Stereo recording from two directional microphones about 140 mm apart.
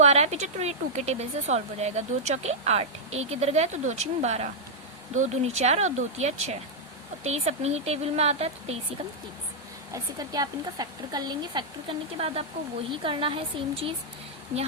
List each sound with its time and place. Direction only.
0.0 s a woman's voice: 50° right (ahead or behind)
9.9 s speech: 25° right (ahead or behind)
12.1 s a woman's voice: 45° right (ahead or behind)